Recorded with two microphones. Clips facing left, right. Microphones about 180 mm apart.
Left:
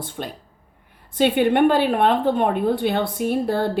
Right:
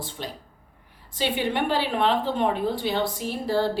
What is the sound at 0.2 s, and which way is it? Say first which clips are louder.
A woman's voice: left 4 dB; 50° left (ahead or behind).